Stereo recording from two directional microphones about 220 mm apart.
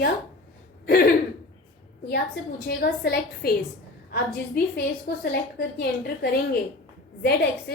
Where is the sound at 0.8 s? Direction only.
45° left (ahead or behind).